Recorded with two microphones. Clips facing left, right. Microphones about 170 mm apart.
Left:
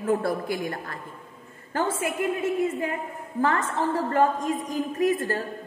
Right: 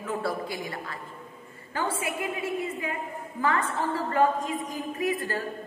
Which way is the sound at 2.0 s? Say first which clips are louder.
Left 5 dB; 50° left (ahead or behind).